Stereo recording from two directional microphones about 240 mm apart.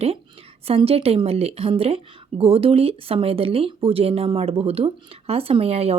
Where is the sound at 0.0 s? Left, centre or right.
Right.